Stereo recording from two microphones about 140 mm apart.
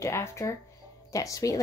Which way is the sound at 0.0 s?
20° left (ahead or behind).